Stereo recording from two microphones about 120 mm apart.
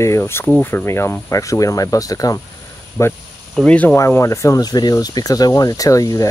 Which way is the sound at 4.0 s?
25° left (ahead or behind).